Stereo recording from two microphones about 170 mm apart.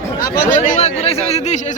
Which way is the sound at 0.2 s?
50° left (ahead or behind).